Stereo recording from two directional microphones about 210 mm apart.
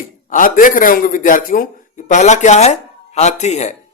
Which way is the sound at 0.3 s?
40° left (ahead or behind).